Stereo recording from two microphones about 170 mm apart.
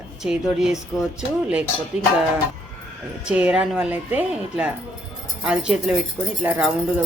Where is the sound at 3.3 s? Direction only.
5° right (ahead or behind).